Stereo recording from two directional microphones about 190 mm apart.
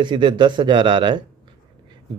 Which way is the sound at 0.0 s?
25° right (ahead or behind).